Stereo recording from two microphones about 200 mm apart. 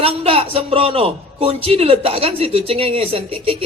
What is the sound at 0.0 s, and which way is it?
A man's voice, 30° right (ahead or behind).